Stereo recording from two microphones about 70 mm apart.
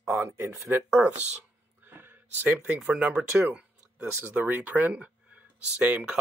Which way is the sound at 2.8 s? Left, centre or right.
Centre.